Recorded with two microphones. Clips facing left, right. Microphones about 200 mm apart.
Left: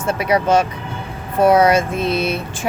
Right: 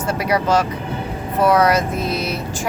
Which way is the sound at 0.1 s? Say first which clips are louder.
Left 3 dB; 25° left (ahead or behind).